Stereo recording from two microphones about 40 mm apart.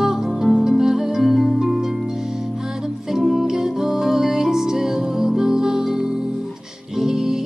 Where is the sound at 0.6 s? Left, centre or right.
Centre.